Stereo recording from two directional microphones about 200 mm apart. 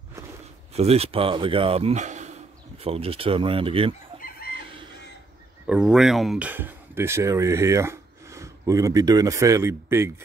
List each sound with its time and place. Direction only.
0.7 s speech: 30° right (ahead or behind)
4.2 s chicken: 45° left (ahead or behind)
5.7 s speech: 5° right (ahead or behind)